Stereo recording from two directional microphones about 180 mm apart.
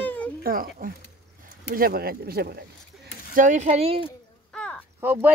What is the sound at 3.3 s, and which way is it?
Speech, 45° right (ahead or behind).